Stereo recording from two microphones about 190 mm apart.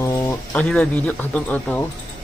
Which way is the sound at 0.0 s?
15° left (ahead or behind).